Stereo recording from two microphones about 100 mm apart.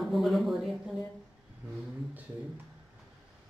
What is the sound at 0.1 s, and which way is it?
Speech, centre (ahead or behind).